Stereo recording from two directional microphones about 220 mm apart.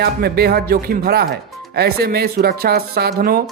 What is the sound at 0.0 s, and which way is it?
Speech, 45° right (ahead or behind).